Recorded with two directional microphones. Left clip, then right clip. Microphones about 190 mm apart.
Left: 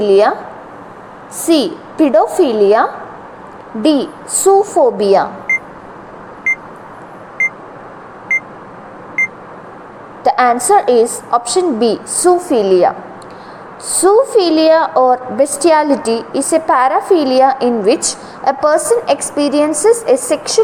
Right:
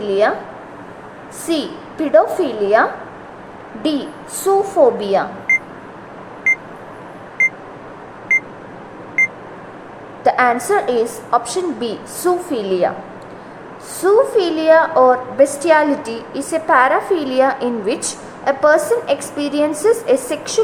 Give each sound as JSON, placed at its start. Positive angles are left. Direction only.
{"t": 0.0, "sound": "a woman's voice", "side_deg": 25}
{"t": 1.5, "sound": "a woman's voice", "side_deg": 25}
{"t": 6.5, "sound": "beep", "side_deg": 0}
{"t": 10.2, "sound": "a woman's voice", "side_deg": 20}
{"t": 13.9, "sound": "a woman's voice", "side_deg": 15}